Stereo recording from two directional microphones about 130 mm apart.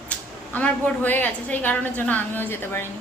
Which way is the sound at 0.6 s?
15° left (ahead or behind).